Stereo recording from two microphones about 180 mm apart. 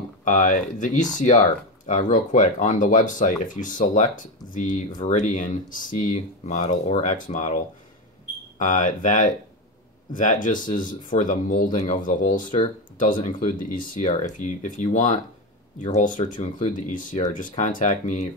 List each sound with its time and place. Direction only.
0.2 s speech: 45° left (ahead or behind)